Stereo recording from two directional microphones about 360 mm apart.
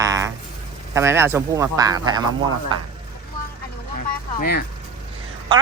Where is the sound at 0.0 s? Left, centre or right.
Centre.